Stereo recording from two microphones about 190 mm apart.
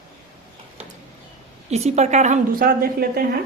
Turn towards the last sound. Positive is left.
turn(degrees=-50)  # may be behind; listen again after turning